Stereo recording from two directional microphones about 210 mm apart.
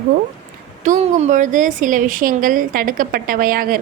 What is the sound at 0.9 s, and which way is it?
A woman's voice, 35° right (ahead or behind).